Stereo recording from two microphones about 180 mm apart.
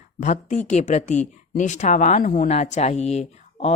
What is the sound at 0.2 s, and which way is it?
Speech, 40° left (ahead or behind).